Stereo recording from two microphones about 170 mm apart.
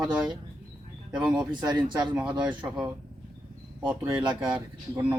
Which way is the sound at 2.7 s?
5° right (ahead or behind).